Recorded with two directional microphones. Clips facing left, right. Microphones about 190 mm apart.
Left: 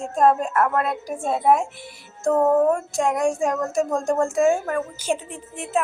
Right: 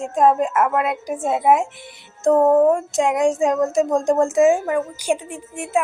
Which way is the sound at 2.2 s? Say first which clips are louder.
Right 4 dB; 20° right (ahead or behind).